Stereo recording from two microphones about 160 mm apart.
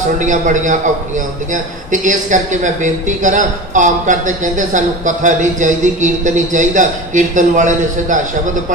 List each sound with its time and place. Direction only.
0.2 s speech: 50° right (ahead or behind)